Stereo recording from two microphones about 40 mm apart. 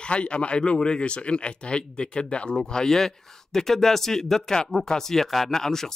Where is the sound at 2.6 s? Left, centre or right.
Centre.